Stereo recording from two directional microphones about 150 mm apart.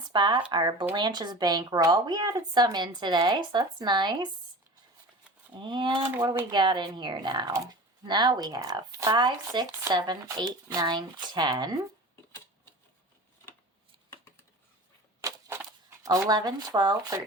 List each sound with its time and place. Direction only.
0.1 s speech: 30° right (ahead or behind)
5.5 s speech: 30° right (ahead or behind)
15.2 s a sound: 20° right (ahead or behind)
16.0 s speech: 25° right (ahead or behind)